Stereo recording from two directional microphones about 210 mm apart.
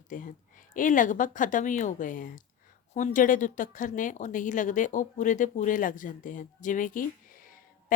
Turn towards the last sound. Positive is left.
turn(degrees=40)  # may be behind; listen again after turning